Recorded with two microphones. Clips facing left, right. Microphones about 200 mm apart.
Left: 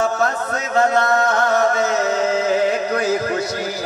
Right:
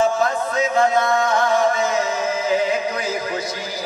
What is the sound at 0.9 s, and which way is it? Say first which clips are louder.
Music: left 1 dB; 70° left (ahead or behind).